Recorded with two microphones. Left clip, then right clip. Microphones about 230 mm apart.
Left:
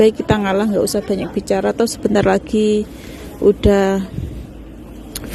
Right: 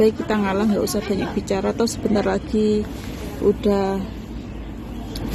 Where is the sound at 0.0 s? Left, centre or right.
Left.